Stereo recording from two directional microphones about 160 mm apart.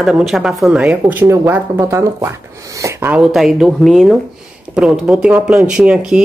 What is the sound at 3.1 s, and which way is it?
Speech, 5° right (ahead or behind).